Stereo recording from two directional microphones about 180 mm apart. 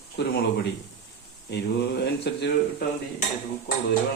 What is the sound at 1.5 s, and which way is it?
Speech, 70° left (ahead or behind).